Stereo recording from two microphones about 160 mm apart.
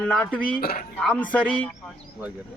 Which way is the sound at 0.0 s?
5° left (ahead or behind).